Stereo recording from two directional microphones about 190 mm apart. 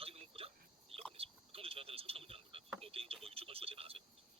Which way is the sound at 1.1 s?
30° right (ahead or behind).